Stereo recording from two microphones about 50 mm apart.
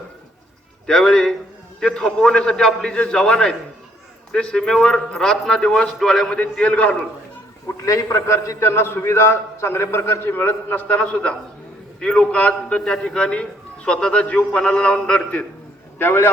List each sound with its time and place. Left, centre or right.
0.9 s a man's voice: centre
6.3 s a man's voice: left
7.9 s a man's voice: left
11.0 s a man's voice: left
12.8 s a man's voice: centre
16.0 s a man's voice: left